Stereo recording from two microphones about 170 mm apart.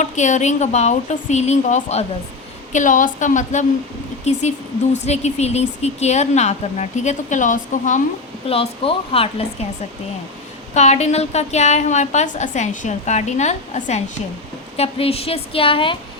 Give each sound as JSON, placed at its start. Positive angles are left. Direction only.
{"t": 0.0, "sound": "a woman's voice", "side_deg": 45}
{"t": 8.4, "sound": "speech", "side_deg": 35}
{"t": 10.8, "sound": "a woman's voice", "side_deg": 40}